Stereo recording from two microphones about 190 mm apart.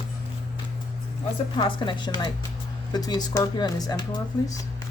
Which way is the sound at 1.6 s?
25° left (ahead or behind).